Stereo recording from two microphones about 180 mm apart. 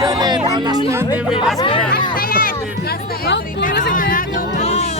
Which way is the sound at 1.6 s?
30° left (ahead or behind).